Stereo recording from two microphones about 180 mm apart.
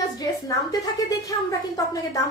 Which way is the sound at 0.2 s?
20° left (ahead or behind).